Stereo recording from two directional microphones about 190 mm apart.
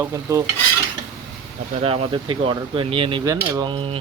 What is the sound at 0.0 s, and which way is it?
Speech, 15° right (ahead or behind).